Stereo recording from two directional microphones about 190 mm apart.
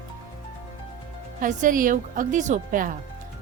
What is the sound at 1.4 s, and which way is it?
A woman's voice, 45° right (ahead or behind).